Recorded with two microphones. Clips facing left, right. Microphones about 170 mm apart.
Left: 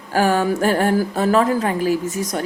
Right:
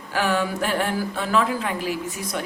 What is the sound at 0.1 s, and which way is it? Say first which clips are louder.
A woman's voice: left 6 dB; 40° left (ahead or behind).